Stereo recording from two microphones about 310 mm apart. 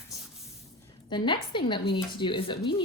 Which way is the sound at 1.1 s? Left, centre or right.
Centre.